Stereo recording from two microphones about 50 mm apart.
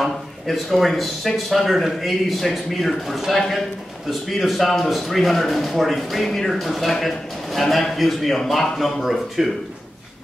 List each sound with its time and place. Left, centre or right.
0.0 s speech: centre